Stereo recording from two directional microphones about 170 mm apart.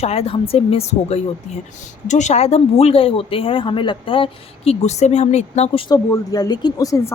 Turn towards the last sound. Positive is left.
turn(degrees=20)  # may be behind; listen again after turning